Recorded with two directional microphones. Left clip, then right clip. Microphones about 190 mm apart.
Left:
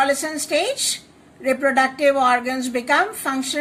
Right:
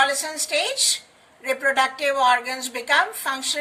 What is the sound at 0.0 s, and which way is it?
A woman's voice, 20° left (ahead or behind).